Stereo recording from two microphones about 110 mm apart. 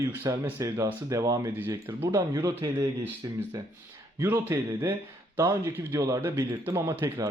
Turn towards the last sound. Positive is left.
turn(degrees=-30)  # may be behind; listen again after turning